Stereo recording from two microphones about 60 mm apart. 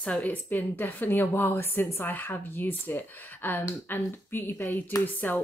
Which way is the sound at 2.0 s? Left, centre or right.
Left.